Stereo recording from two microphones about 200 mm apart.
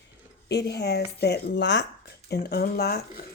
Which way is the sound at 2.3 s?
50° left (ahead or behind).